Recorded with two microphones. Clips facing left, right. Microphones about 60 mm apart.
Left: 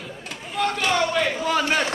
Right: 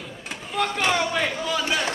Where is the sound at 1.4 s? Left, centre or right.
Left.